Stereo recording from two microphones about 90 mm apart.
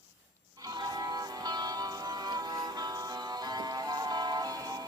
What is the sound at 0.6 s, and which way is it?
Music, 45° right (ahead or behind).